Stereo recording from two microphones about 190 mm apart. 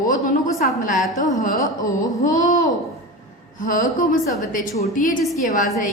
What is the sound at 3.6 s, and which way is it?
A woman's voice, 45° left (ahead or behind).